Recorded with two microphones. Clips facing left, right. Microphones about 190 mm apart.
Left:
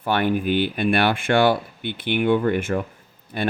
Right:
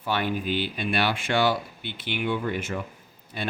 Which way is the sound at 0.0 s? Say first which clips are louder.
Left 6 dB; 55° left (ahead or behind).